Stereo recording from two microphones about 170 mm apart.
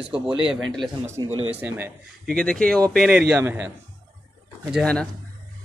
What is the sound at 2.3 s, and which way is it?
A man's voice, 5° left (ahead or behind).